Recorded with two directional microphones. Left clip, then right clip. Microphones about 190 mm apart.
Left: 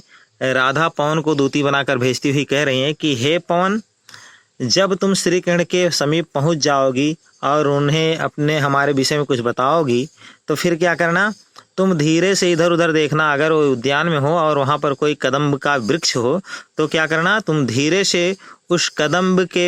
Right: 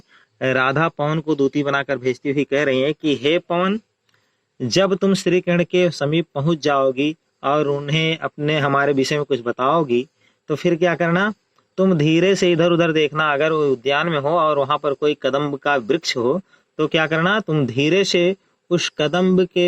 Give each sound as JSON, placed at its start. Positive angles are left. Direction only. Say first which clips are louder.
{"t": 0.3, "sound": "a man's voice", "louder": "left 2 dB", "side_deg": 25}